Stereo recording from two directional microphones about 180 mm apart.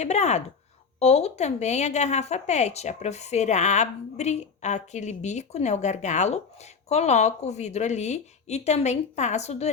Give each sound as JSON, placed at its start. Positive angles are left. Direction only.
{"t": 0.0, "sound": "a woman's voice", "side_deg": 40}